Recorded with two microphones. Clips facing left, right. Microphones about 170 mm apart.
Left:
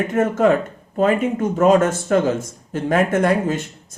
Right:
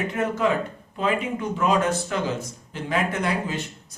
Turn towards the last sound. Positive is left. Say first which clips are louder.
# left 8 dB
turn(degrees=50)  # may be behind; listen again after turning